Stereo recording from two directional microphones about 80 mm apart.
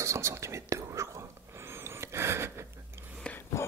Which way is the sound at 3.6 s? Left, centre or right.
Left.